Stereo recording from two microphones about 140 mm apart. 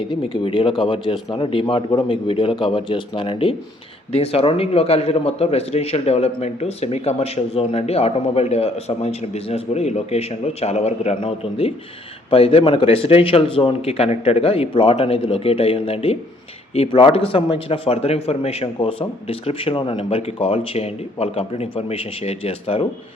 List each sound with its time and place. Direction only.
0.0 s a man's voice: 35° left (ahead or behind)